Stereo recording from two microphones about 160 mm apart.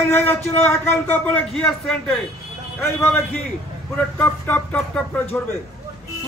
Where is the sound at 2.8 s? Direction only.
15° left (ahead or behind).